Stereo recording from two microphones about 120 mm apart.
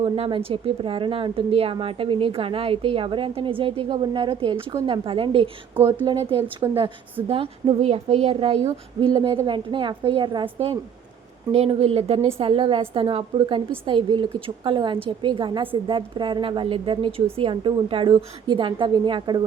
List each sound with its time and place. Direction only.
0.0 s a woman's voice: 45° right (ahead or behind)
6.6 s a woman's voice: 35° right (ahead or behind)
7.3 s speech: 55° right (ahead or behind)
11.5 s speech: 60° right (ahead or behind)
12.4 s a woman's voice: 45° right (ahead or behind)